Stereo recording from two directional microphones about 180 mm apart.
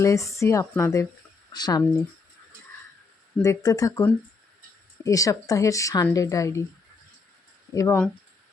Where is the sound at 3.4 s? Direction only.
20° left (ahead or behind).